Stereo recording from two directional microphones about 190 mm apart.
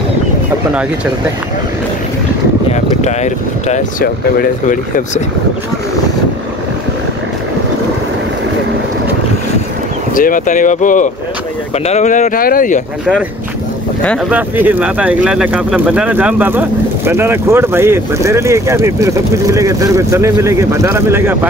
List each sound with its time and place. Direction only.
2.7 s speech: 35° left (ahead or behind)
4.0 s speech: 50° left (ahead or behind)
10.1 s speech: 45° left (ahead or behind)
14.3 s speech: 10° right (ahead or behind)